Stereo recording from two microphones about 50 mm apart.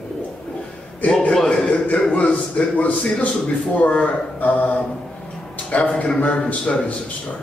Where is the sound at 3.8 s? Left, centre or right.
Left.